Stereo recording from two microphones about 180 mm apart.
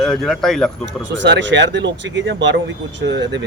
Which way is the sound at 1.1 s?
80° right.